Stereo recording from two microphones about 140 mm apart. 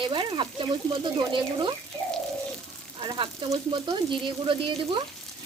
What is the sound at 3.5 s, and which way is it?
Speech, 35° right (ahead or behind).